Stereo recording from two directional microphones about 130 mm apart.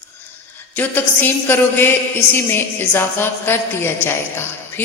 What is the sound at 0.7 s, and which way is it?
A woman's voice, 15° left (ahead or behind).